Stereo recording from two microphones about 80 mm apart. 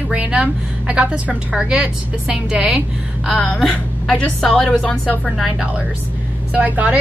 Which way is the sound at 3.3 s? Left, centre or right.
Centre.